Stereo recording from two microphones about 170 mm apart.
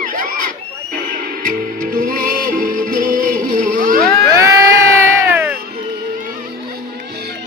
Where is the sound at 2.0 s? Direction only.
55° right (ahead or behind).